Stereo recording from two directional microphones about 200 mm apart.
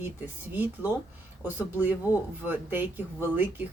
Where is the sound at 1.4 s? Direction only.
10° right (ahead or behind).